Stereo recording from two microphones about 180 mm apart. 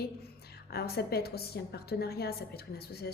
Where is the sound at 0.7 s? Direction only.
60° left (ahead or behind).